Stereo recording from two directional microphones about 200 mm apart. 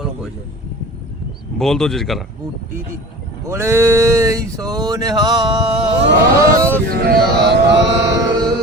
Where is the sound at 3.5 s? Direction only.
15° right (ahead or behind).